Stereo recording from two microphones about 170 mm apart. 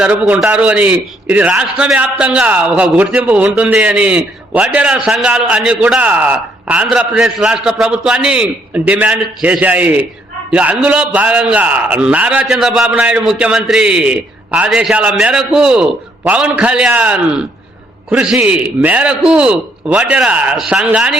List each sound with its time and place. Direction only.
0.0 s a man's voice: 5° right (ahead or behind)